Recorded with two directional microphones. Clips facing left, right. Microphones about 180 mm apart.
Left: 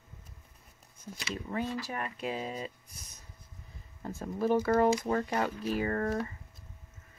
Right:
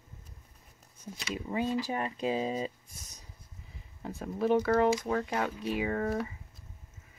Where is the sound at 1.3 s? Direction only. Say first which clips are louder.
Right 3 dB; 15° right (ahead or behind).